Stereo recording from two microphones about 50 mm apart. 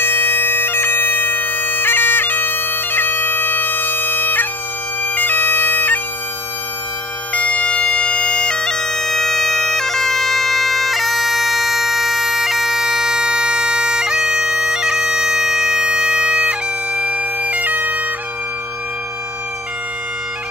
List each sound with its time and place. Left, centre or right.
0.0 s bagpipes: left
7.3 s bagpipes: left; by 18.0 s right